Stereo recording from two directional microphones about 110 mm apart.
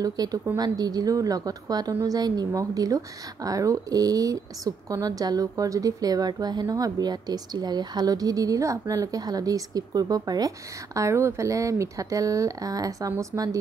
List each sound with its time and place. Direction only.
0.0 s a woman's voice: 35° right (ahead or behind)